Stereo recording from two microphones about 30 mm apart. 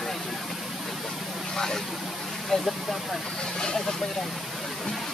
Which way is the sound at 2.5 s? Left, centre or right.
Centre.